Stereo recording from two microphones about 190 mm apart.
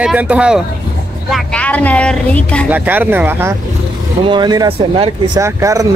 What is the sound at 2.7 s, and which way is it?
Speech, 10° right (ahead or behind).